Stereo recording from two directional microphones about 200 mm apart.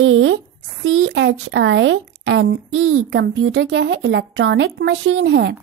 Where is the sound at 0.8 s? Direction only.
90° right; by 5.5 s 60° right (ahead or behind).